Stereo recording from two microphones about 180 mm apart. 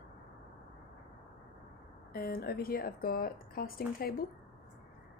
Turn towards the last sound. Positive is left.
turn(degrees=55)  # may be behind; listen again after turning